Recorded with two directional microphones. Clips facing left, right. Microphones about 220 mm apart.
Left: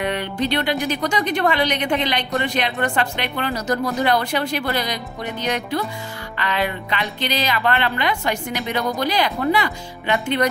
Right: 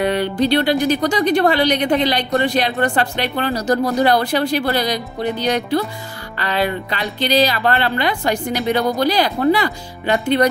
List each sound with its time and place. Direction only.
0.0 s speech: 35° right (ahead or behind)